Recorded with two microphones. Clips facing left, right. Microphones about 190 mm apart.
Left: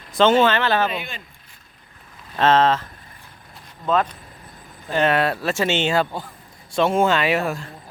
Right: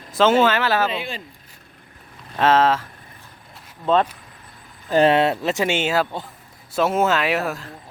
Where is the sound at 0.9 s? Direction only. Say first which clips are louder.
Right 2 dB; 30° right (ahead or behind).